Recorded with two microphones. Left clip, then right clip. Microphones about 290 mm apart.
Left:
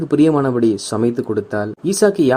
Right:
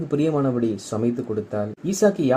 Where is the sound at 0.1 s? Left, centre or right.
Left.